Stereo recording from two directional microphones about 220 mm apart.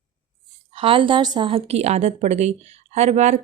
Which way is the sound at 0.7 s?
25° right (ahead or behind).